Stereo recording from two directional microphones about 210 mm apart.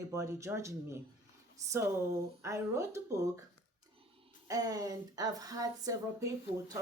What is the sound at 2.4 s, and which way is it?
Speech, 15° right (ahead or behind).